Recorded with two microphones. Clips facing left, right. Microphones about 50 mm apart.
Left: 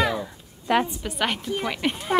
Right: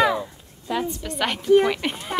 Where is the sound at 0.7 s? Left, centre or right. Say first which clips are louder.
Left 5 dB; left.